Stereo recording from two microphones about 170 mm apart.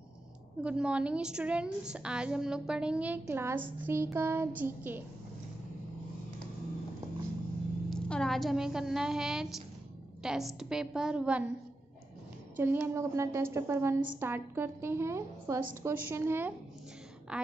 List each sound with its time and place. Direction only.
0.6 s a woman's voice: 5° right (ahead or behind)
7.9 s a woman's voice: 5° left (ahead or behind)
12.5 s a woman's voice: 10° right (ahead or behind)